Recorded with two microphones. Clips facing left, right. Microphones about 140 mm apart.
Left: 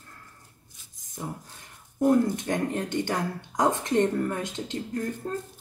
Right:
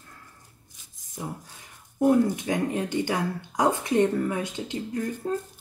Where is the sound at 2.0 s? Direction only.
5° right (ahead or behind).